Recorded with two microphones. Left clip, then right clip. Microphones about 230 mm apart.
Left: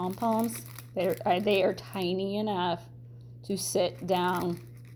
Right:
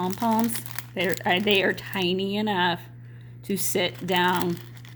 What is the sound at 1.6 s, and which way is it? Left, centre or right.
Speech, right.